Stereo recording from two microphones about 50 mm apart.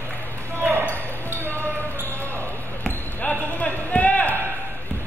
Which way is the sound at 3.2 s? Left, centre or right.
Left.